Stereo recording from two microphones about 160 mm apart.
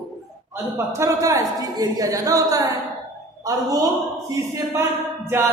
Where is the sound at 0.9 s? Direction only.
20° right (ahead or behind).